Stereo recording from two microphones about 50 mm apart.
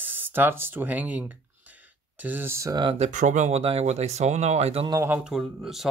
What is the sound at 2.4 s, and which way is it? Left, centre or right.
Speech, right.